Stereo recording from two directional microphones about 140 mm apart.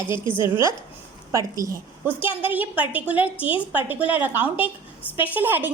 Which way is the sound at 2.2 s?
15° right (ahead or behind).